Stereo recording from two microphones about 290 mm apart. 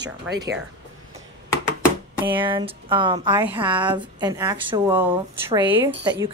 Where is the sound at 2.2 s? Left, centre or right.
Centre.